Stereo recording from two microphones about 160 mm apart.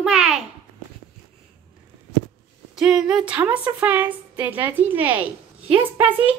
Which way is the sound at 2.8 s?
5° right (ahead or behind).